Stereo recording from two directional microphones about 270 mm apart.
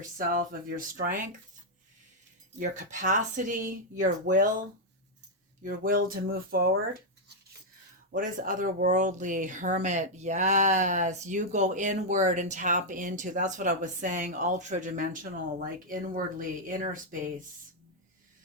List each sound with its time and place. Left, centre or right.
0.0 s speech: right
2.6 s speech: right
5.6 s speech: right
8.1 s speech: right